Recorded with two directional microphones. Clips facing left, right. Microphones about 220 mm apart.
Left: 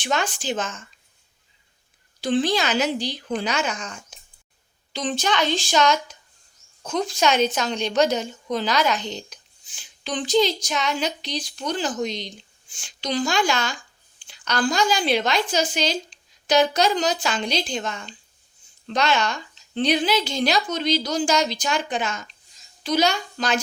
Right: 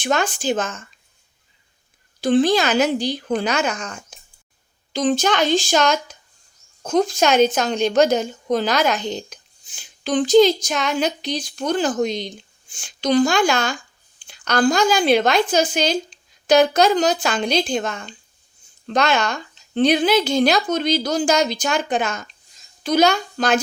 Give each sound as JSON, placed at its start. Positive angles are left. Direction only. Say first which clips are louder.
{"t": 0.0, "sound": "a woman's voice", "louder": "right 5 dB", "side_deg": -50}
{"t": 2.2, "sound": "a woman's voice", "louder": "right 5 dB", "side_deg": -50}